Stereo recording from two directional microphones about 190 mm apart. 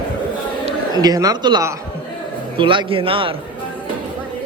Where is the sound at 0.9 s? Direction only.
20° right (ahead or behind).